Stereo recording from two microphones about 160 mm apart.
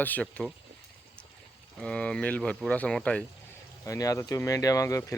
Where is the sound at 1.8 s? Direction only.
5° left (ahead or behind).